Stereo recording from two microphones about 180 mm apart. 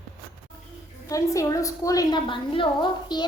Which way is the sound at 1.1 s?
20° left (ahead or behind).